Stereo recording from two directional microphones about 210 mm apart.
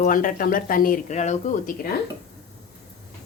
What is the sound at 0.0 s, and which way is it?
Speech, 40° left (ahead or behind).